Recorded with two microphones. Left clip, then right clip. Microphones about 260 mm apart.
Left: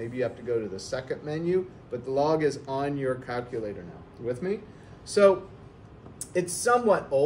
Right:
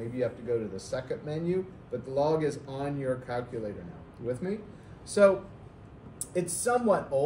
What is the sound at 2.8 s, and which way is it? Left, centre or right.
Speech, centre.